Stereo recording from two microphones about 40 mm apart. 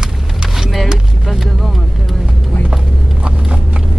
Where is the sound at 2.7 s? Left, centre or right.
Centre.